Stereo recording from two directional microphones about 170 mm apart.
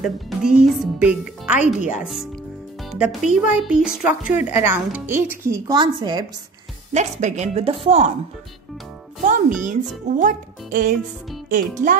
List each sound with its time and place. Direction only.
0.0 s speech: centre (ahead or behind)
2.8 s speech: centre (ahead or behind); by 6.2 s 25° right (ahead or behind)
6.9 s a woman's voice: 45° right (ahead or behind)
9.2 s speech: 50° right (ahead or behind)